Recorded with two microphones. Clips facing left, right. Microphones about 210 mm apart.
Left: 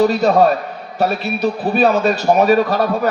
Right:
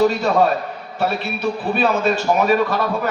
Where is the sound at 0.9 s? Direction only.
40° left (ahead or behind).